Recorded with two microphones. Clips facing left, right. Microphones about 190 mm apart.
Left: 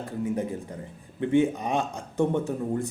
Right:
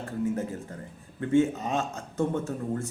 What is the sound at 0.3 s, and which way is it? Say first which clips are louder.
A man's voice: left 3 dB; 15° left (ahead or behind).